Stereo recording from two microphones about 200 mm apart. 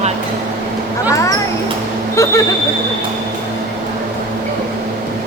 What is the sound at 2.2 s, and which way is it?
Speech, 15° left (ahead or behind).